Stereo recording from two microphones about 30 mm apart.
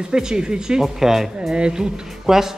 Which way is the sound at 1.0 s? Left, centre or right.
Centre.